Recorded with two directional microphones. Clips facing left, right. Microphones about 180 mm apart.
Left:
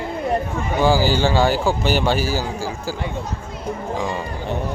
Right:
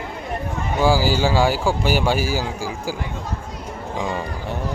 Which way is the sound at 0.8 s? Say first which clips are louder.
Left 1 dB; 10° right (ahead or behind).